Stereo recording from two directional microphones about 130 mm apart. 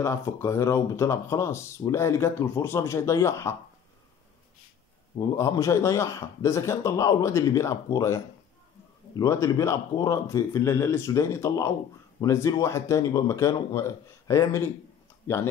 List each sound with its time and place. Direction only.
0.0 s speech: 20° left (ahead or behind)
5.1 s speech: 25° left (ahead or behind)